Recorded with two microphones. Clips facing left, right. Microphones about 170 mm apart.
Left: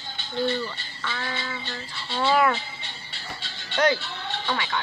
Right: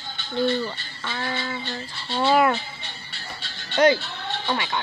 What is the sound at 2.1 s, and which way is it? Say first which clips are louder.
Speech: right 2 dB; 20° right (ahead or behind).